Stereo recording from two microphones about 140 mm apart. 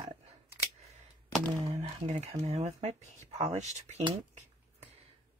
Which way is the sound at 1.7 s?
50° right (ahead or behind).